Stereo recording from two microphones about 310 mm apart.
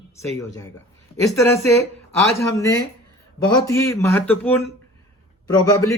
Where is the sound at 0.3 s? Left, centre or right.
Centre.